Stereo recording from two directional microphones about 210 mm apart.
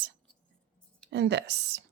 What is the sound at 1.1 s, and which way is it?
Speech, 55° right (ahead or behind).